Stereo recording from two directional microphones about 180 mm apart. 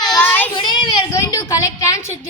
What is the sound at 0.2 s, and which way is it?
Child singing, 10° left (ahead or behind).